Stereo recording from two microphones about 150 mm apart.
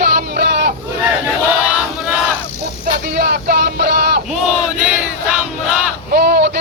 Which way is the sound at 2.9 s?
90° right.